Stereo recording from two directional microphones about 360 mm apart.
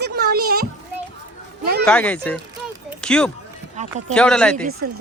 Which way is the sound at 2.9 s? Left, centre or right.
Centre.